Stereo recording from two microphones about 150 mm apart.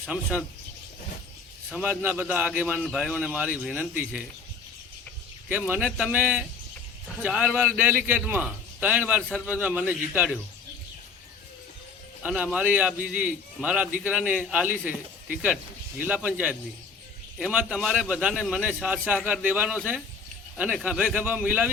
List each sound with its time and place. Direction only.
0.0 s speech: centre (ahead or behind)
1.7 s a man's voice: 10° right (ahead or behind)
5.5 s a man's voice: 10° right (ahead or behind)
12.2 s a man's voice: 5° right (ahead or behind)